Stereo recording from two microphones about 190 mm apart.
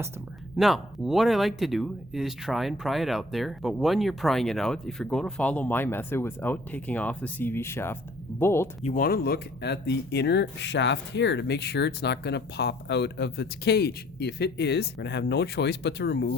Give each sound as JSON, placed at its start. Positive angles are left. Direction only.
{"t": 0.5, "sound": "speech", "side_deg": 0}
{"t": 8.8, "sound": "speech", "side_deg": 45}